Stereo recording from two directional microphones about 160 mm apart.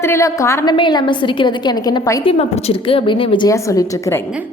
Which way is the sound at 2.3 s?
40° left (ahead or behind).